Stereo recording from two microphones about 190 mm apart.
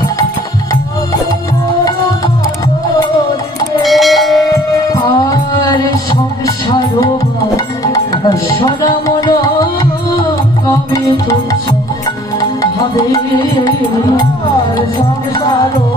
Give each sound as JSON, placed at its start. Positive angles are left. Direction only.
{"t": 3.8, "sound": "bell", "side_deg": 0}
{"t": 6.4, "sound": "music", "side_deg": 20}